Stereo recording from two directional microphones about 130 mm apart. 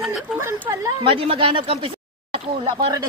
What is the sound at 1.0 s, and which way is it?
Speech, 45° right (ahead or behind).